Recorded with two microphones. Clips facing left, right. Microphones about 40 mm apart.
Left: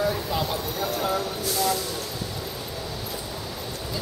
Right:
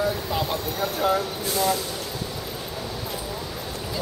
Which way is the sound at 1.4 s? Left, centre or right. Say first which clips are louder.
Right 1 dB; right.